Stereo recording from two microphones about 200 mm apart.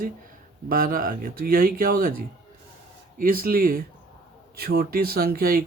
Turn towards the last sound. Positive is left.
turn(degrees=-50)  # may be behind; listen again after turning